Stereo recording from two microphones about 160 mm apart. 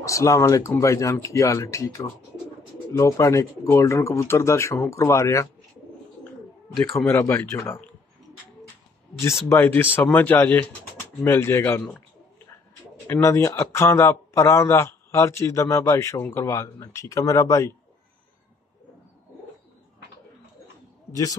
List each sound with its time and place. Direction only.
0.0 s speech: 20° left (ahead or behind)
7.0 s speech: 15° left (ahead or behind)
9.5 s speech: 15° left (ahead or behind)
13.0 s speech: 15° left (ahead or behind)